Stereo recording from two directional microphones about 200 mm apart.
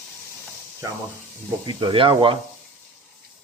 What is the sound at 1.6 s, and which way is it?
Speech, 25° right (ahead or behind).